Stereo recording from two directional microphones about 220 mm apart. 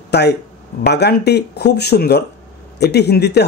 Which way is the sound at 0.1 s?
50° left (ahead or behind).